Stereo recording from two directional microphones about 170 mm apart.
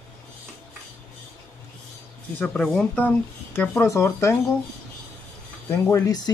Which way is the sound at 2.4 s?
5° left (ahead or behind).